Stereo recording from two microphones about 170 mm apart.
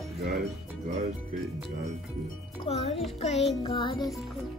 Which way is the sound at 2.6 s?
35° left (ahead or behind).